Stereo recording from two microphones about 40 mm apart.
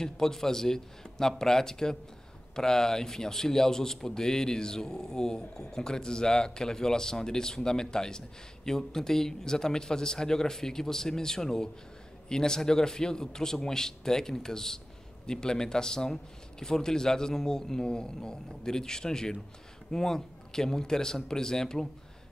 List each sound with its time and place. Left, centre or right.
0.0 s a man's voice: centre